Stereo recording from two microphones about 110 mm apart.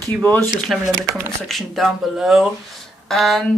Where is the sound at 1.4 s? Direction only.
Centre (ahead or behind).